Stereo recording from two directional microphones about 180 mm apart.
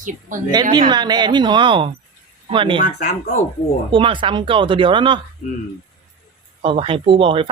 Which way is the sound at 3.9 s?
30° right (ahead or behind).